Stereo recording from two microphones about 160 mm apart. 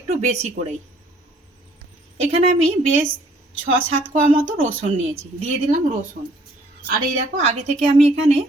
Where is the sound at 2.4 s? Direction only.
40° right (ahead or behind).